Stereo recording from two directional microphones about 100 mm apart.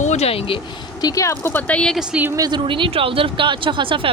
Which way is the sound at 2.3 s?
40° right (ahead or behind).